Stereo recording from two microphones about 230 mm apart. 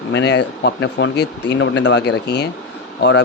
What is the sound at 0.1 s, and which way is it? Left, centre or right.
Speech, left.